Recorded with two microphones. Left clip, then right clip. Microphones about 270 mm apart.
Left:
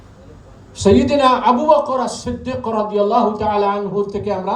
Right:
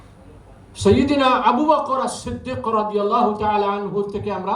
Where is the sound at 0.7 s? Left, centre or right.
Centre.